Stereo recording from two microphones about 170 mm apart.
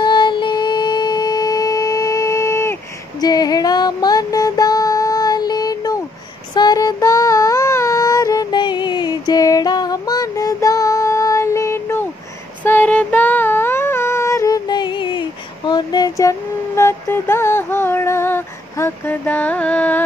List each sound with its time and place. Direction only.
0.0 s a sound: 25° left (ahead or behind)
6.5 s music: 25° left (ahead or behind)
12.6 s female singing: 10° left (ahead or behind)